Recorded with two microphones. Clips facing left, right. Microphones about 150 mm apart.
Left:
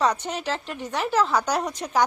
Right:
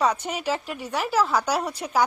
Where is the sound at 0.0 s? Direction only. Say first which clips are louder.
Even; 10° right (ahead or behind).